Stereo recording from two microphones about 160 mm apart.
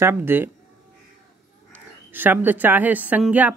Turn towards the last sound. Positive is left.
turn(degrees=-10)  # may be behind; listen again after turning